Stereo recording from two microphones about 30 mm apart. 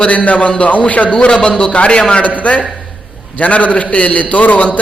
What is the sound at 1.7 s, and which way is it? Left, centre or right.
Speech, left.